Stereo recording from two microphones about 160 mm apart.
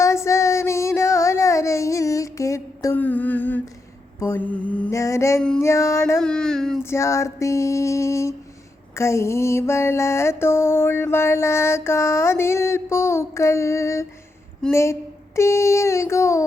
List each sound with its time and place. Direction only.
0.0 s child singing: 20° left (ahead or behind)
4.2 s mantra: 10° left (ahead or behind)
6.1 s a sound: 5° left (ahead or behind)
6.8 s female singing: 15° left (ahead or behind)
9.0 s mantra: 15° left (ahead or behind)